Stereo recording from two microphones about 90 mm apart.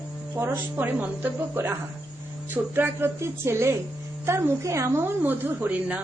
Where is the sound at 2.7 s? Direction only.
25° right (ahead or behind).